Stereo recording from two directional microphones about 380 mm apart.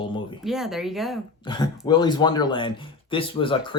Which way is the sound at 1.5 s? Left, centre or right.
Centre.